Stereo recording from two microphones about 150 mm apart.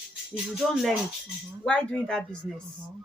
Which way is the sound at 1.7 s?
5° left (ahead or behind).